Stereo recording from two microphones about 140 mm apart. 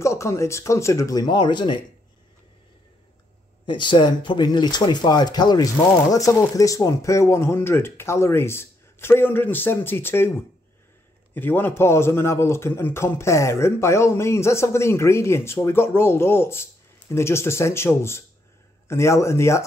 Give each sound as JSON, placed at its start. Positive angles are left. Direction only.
{"t": 0.0, "sound": "a man's voice", "side_deg": 20}
{"t": 3.6, "sound": "a man's voice", "side_deg": 35}